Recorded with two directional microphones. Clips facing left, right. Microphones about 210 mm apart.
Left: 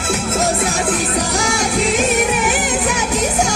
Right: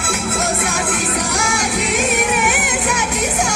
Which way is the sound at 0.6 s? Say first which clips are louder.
Left 2 dB; 35° left (ahead or behind).